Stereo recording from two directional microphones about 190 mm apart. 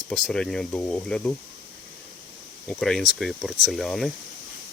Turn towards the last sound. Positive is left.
turn(degrees=0)  # may be behind; listen again after turning